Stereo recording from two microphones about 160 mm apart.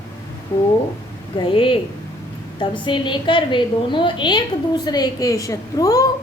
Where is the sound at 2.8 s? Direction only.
30° left (ahead or behind).